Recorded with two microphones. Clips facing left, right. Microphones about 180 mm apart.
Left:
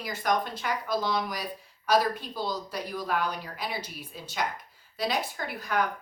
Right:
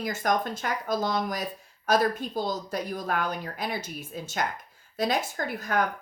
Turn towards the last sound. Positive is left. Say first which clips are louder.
# right 3 dB
turn(degrees=-45)  # may be behind; listen again after turning